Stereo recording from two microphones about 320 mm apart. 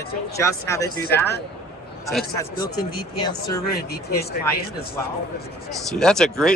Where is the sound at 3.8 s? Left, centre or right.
Left.